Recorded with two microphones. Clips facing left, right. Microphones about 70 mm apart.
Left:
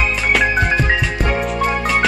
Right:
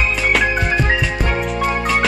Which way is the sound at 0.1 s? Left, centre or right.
Centre.